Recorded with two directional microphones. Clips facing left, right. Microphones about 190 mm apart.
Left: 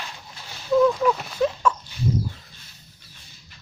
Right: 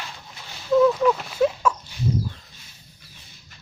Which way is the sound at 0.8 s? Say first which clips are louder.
Right 1 dB; 5° right (ahead or behind).